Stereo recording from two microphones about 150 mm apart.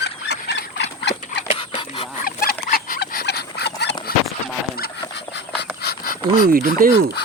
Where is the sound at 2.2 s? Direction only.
80° left.